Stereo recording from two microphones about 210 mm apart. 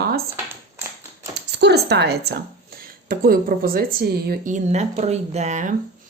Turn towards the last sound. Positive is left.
turn(degrees=-35)  # may be behind; listen again after turning